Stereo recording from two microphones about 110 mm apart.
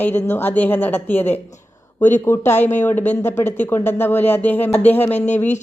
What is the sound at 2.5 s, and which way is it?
Speech, 90° left.